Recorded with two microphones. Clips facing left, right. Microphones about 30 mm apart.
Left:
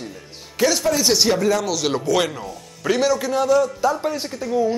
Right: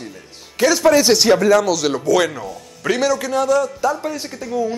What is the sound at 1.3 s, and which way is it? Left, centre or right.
Speech, centre.